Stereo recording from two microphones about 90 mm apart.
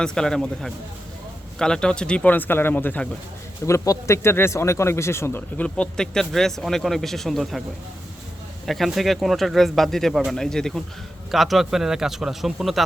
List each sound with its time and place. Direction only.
0.0 s speech: 5° left (ahead or behind)
3.7 s speech: 35° left (ahead or behind)
5.5 s speech: 10° left (ahead or behind)
8.6 s speech: centre (ahead or behind)